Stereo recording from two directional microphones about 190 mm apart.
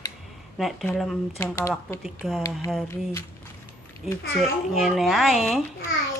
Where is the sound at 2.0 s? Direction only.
Centre (ahead or behind).